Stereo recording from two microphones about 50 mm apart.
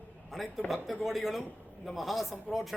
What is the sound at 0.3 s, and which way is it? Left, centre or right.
A man's voice, centre.